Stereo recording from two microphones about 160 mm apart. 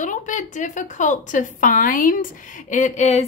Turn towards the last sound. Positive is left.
turn(degrees=45)  # may be behind; listen again after turning